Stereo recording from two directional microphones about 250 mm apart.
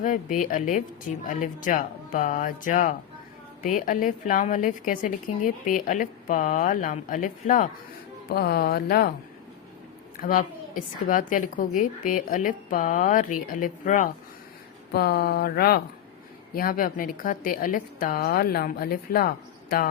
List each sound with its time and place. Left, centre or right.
0.0 s a woman's voice: left
10.2 s a woman's voice: left